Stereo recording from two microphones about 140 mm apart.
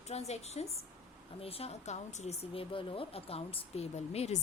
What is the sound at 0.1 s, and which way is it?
Speech, 50° left (ahead or behind).